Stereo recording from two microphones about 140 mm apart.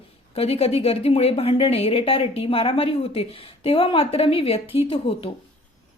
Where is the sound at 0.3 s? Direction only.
45° left (ahead or behind).